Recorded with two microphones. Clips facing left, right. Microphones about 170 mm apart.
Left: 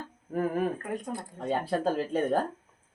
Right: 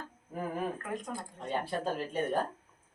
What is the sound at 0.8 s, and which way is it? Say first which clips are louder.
Speech: left 4 dB; 30° left (ahead or behind).